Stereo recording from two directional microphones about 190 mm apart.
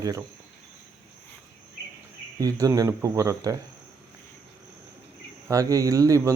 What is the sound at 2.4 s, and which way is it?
A man's voice, 15° right (ahead or behind).